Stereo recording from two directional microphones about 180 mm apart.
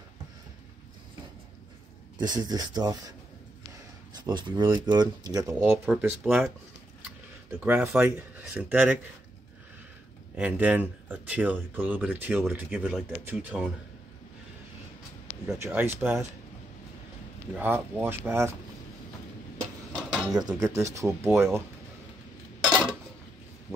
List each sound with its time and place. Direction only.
2.1 s speech: 25° right (ahead or behind)
4.2 s speech: 25° right (ahead or behind)
5.9 s speech: centre (ahead or behind)
7.6 s speech: 10° right (ahead or behind)
10.3 s speech: 10° right (ahead or behind)
15.4 s speech: 10° right (ahead or behind)
17.6 s speech: 10° right (ahead or behind)
19.9 s dishes: centre (ahead or behind)
20.3 s speech: 20° right (ahead or behind)